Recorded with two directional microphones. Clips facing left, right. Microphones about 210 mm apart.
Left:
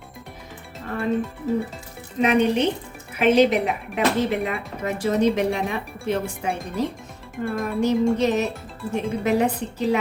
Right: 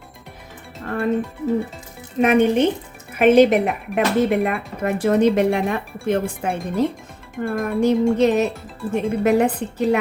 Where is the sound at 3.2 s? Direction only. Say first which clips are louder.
Right 4 dB; 55° right (ahead or behind).